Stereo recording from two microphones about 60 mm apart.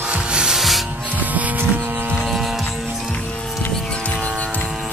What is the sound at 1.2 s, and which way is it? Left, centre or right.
Music, right.